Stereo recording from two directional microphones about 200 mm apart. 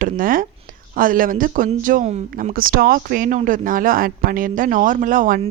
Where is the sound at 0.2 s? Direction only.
45° right (ahead or behind).